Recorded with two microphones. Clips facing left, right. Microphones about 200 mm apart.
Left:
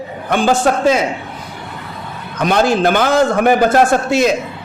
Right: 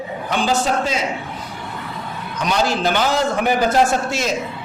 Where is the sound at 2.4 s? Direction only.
55° left (ahead or behind).